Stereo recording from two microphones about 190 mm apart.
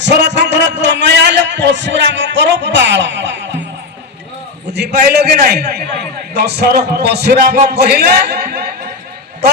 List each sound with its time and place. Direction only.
0.0 s a man's voice: 65° right (ahead or behind)
4.7 s a man's voice: 60° right (ahead or behind)